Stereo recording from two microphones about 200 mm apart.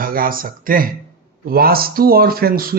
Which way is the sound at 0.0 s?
45° right (ahead or behind).